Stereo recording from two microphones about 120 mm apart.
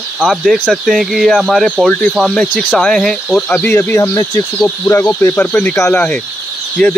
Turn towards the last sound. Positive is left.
turn(degrees=5)  # may be behind; listen again after turning